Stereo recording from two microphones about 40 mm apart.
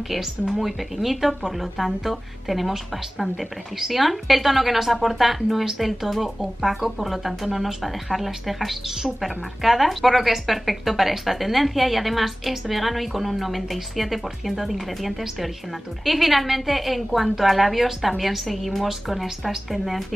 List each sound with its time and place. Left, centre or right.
0.5 s a woman's voice: centre